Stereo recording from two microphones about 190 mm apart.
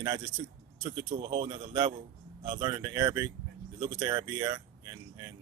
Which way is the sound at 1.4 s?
20° right (ahead or behind).